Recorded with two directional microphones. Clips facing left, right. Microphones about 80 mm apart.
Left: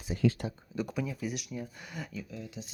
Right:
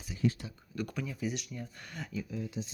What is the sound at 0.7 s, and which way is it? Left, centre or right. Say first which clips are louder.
Speech: left 2 dB; centre.